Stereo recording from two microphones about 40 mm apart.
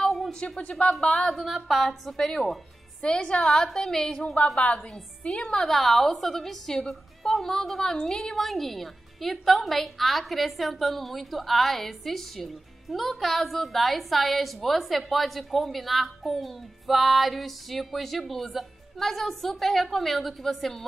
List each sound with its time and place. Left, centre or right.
0.6 s a woman's voice: left
1.3 s a woman's voice: centre
3.0 s a woman's voice: left
3.6 s a woman's voice: centre
4.6 s a woman's voice: left
5.6 s a woman's voice: centre